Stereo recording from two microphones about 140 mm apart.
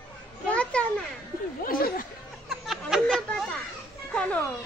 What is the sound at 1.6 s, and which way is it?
Speech, 90° left.